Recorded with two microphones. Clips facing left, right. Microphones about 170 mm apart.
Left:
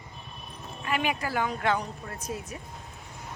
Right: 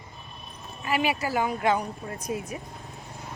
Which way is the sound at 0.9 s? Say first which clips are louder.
Right 3 dB; 5° right (ahead or behind).